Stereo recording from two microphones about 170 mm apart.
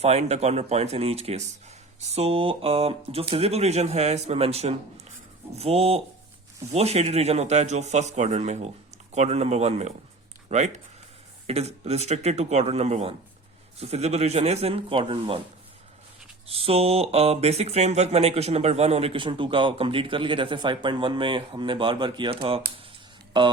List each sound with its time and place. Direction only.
0.0 s speech: 40° right (ahead or behind)
16.5 s speech: 35° right (ahead or behind)